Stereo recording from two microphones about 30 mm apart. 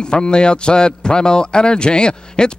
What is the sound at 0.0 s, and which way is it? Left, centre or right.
A man's voice, left.